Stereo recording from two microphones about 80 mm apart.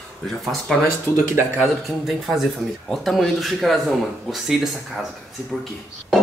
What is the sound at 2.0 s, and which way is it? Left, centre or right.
Speech, centre.